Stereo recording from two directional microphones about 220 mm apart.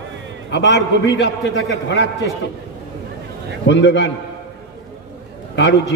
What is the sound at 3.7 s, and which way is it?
Speech, 55° left (ahead or behind).